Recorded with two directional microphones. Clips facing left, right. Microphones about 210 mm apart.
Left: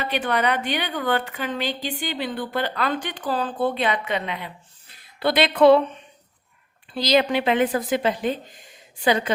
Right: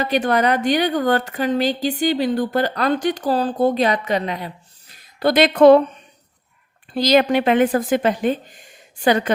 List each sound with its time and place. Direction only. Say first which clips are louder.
0.0 s a woman's voice: right 5 dB; 40° right (ahead or behind)
6.9 s a woman's voice: right 4 dB; 50° right (ahead or behind)